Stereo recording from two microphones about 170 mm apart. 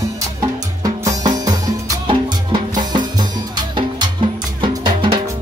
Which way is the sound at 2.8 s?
25° right (ahead or behind).